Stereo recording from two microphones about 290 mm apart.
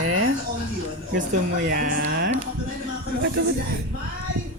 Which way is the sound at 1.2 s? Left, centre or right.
Right.